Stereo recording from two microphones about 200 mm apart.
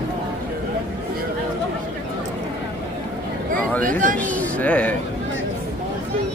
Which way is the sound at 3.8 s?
40° right (ahead or behind).